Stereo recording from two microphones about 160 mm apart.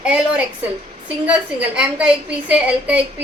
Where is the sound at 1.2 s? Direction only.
5° right (ahead or behind).